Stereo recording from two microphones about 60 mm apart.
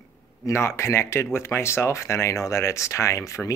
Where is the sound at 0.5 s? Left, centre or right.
Left.